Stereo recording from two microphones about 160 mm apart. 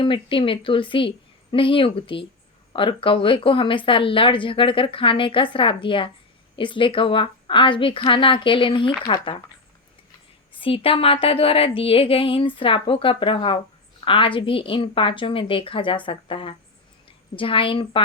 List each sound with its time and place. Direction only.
0.0 s speech: 30° left (ahead or behind)
10.6 s speech: 35° left (ahead or behind)